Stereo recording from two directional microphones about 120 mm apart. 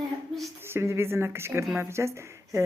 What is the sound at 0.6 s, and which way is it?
Speech, 20° right (ahead or behind).